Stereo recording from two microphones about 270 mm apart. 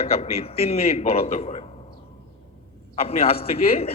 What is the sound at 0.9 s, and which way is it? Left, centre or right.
Speech, left.